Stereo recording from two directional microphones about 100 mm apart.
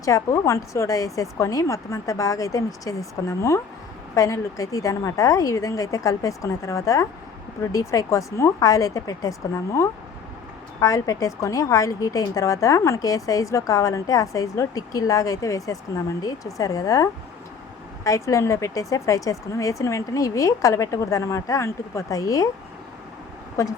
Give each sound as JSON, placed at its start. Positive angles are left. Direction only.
{"t": 0.0, "sound": "a woman's voice", "side_deg": 35}
{"t": 10.8, "sound": "a woman's voice", "side_deg": 35}
{"t": 23.6, "sound": "a woman's voice", "side_deg": 30}